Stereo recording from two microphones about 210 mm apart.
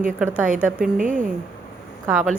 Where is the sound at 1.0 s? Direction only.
35° right (ahead or behind).